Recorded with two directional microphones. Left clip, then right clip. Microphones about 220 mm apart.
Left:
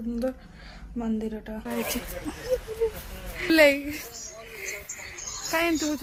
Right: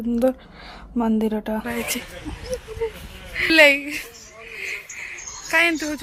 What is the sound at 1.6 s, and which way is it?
Speech, 5° right (ahead or behind).